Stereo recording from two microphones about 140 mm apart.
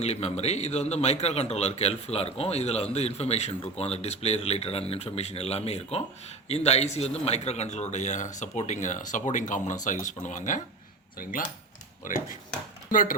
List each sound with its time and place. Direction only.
0.0 s a man's voice: 50° left (ahead or behind); by 10.6 s 65° left (ahead or behind)
11.2 s speech: 80° left
12.0 s speech: 65° left (ahead or behind)
12.9 s speech: 75° left (ahead or behind)